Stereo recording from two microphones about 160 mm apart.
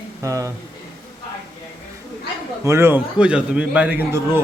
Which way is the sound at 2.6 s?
15° right (ahead or behind).